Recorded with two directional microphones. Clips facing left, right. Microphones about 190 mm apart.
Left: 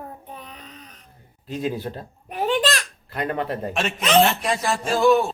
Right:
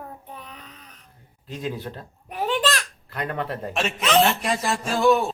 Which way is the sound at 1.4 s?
5° left (ahead or behind).